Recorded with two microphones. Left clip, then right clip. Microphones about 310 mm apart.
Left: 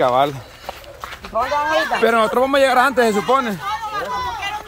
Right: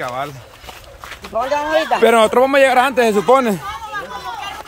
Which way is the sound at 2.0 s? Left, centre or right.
Centre.